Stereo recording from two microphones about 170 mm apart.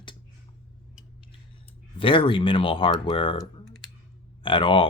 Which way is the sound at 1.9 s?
30° left (ahead or behind).